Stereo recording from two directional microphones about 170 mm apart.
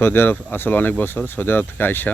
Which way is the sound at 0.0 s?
15° left (ahead or behind).